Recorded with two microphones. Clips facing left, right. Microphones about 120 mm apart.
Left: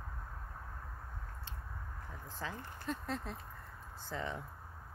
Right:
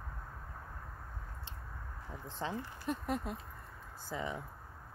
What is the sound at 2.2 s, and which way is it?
Speech, 25° right (ahead or behind).